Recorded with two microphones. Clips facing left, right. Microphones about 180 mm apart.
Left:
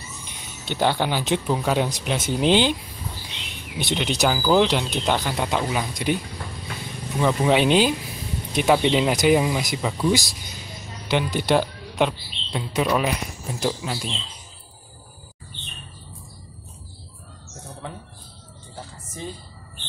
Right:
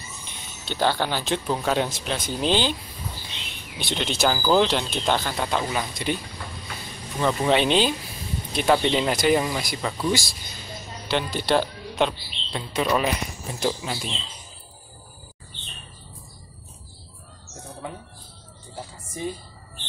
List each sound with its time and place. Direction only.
0.7 s speech: 15° left (ahead or behind)
7.2 s speech: 10° left (ahead or behind)
17.8 s music: 5° right (ahead or behind)